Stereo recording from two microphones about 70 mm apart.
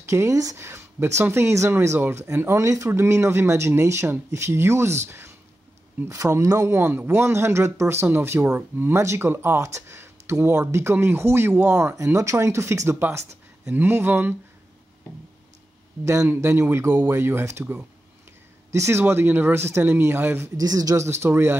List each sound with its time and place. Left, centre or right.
0.0 s speech: right
0.6 s speech: right
6.8 s speech: right
16.3 s speech: right
20.5 s speech: right
20.9 s speech: right